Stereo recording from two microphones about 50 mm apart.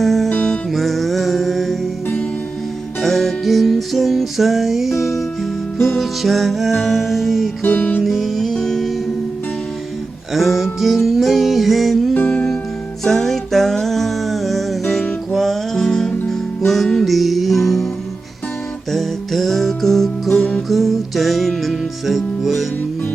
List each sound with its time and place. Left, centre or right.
0.0 s music: centre
3.0 s music: centre
6.0 s music: centre
7.6 s music: left
8.0 s music: centre
10.3 s music: centre
12.2 s music: centre
13.1 s music: centre
18.9 s music: centre